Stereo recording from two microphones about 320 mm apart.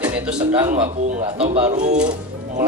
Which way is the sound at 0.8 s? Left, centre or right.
Right.